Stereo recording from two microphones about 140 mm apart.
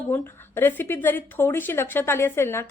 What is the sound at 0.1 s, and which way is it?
Speech, 15° left (ahead or behind).